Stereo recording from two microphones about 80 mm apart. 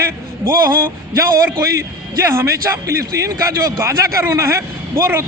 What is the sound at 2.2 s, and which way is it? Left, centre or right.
A man's voice, right.